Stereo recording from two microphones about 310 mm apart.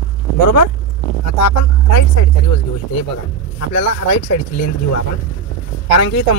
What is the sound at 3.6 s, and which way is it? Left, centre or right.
Speech, left.